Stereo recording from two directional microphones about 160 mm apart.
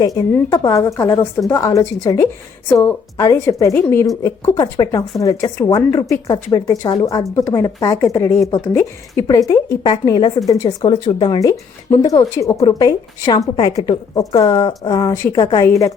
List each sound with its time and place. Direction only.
0.0 s speech: 25° left (ahead or behind)